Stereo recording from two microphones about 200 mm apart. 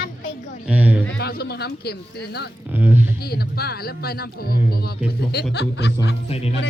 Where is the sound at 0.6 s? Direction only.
10° right (ahead or behind).